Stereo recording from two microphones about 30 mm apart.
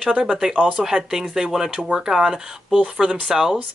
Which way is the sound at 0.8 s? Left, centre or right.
Centre.